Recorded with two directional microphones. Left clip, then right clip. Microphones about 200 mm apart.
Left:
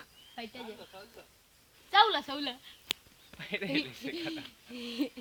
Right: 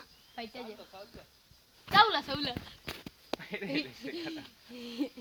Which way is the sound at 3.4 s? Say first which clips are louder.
Left 3 dB; 55° left (ahead or behind).